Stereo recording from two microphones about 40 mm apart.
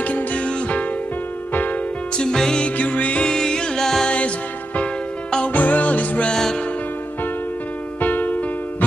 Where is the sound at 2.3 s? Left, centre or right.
Centre.